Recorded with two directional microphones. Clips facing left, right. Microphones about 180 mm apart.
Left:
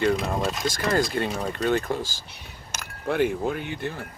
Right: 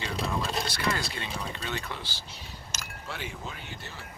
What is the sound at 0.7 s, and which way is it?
Speech, 45° left (ahead or behind).